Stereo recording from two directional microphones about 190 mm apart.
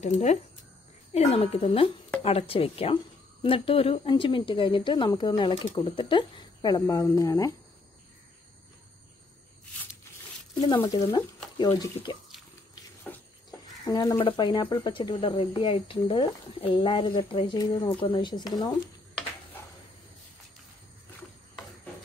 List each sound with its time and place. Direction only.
0.0 s speech: 35° left (ahead or behind); by 7.5 s 20° left (ahead or behind)
10.7 s speech: 15° left (ahead or behind)
13.1 s a sound: 10° left (ahead or behind)
13.8 s speech: 20° left (ahead or behind)